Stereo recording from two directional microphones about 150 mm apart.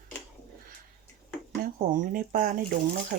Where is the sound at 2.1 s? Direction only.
70° right (ahead or behind).